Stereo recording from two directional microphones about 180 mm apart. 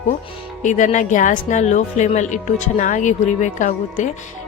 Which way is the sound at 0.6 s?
45° left (ahead or behind).